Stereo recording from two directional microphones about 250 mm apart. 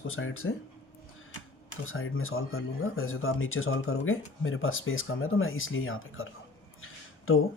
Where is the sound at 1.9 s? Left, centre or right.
Left.